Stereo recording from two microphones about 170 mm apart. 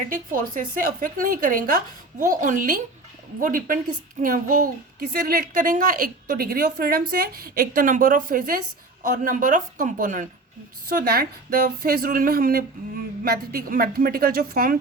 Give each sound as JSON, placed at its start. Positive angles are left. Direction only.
{"t": 0.1, "sound": "a woman's voice", "side_deg": -55}
{"t": 10.8, "sound": "a woman's voice", "side_deg": -60}